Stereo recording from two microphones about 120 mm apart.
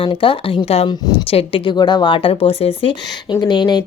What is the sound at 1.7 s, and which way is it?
Speech, 40° left (ahead or behind).